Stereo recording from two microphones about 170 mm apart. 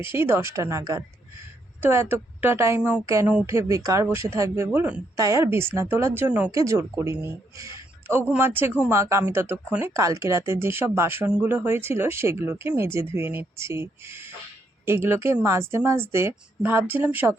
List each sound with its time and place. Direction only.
0.0 s speech: 15° right (ahead or behind)